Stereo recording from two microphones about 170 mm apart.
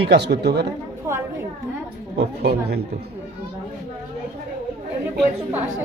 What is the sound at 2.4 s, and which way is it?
Speech, 70° right (ahead or behind).